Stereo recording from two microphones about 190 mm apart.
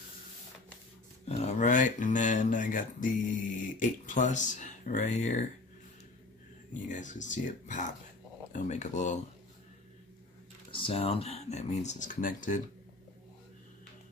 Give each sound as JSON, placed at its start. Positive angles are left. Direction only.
{"t": 1.4, "sound": "speech", "side_deg": 40}
{"t": 6.9, "sound": "speech", "side_deg": 40}
{"t": 10.7, "sound": "speech", "side_deg": 30}